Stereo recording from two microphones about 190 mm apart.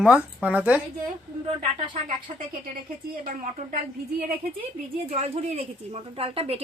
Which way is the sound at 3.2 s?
45° right (ahead or behind).